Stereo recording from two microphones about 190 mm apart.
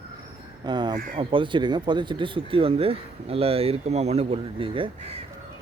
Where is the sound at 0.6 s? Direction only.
25° right (ahead or behind).